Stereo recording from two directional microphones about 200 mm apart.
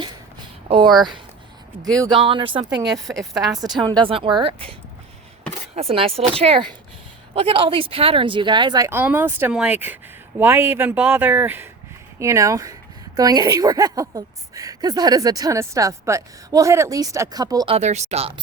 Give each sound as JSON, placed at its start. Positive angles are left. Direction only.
{"t": 2.0, "sound": "speech", "side_deg": -25}
{"t": 3.1, "sound": "a woman's voice", "side_deg": 0}
{"t": 3.8, "sound": "speech", "side_deg": -20}
{"t": 5.7, "sound": "a woman's voice", "side_deg": -30}
{"t": 17.7, "sound": "speech", "side_deg": -35}